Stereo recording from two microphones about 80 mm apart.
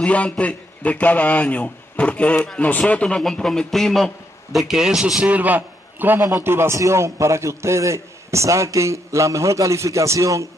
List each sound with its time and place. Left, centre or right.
0.0 s a man's voice: centre; by 6.2 s right
6.2 s a man's voice: right